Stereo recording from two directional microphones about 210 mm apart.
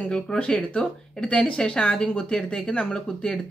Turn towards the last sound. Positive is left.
turn(degrees=5)  # may be behind; listen again after turning